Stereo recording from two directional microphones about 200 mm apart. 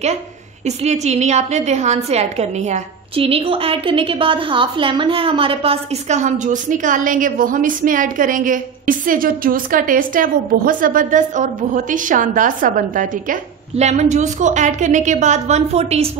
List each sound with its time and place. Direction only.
0.7 s a woman's voice: 35° right (ahead or behind)